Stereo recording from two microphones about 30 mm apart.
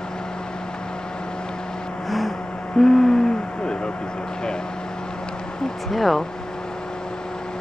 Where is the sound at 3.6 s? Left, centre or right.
Left.